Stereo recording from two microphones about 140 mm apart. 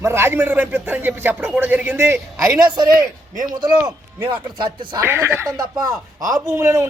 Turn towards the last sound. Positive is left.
turn(degrees=-20)  # may be behind; listen again after turning